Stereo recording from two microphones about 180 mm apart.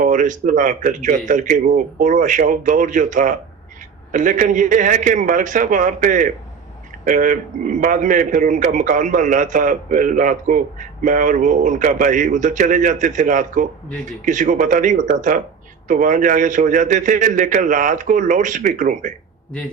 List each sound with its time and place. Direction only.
0.0 s a man's voice: 45° right (ahead or behind)